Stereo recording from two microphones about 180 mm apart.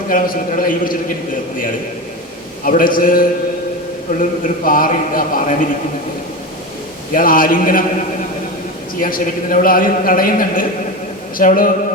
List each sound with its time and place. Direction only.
0.1 s a man's voice: 50° left (ahead or behind)
2.6 s a man's voice: 50° left (ahead or behind)
7.1 s a man's voice: 50° left (ahead or behind)
9.0 s a man's voice: 50° left (ahead or behind)